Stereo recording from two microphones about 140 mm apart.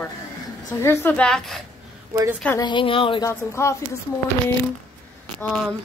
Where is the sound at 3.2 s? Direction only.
20° left (ahead or behind).